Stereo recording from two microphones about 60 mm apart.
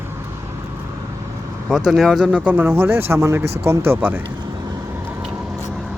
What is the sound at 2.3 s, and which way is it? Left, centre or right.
Speech, right.